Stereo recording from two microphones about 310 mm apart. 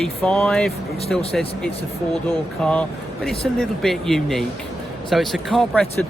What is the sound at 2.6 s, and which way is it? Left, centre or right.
Speech, centre.